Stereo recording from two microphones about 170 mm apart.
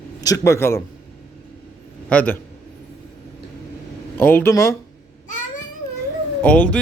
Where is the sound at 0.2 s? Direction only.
20° left (ahead or behind).